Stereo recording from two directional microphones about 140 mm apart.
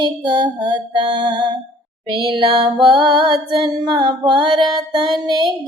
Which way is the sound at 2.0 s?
35° right (ahead or behind).